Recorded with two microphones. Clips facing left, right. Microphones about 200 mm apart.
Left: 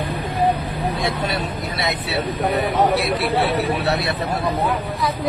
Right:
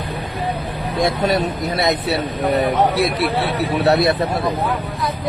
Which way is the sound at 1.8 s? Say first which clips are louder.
Right 7 dB; 40° right (ahead or behind).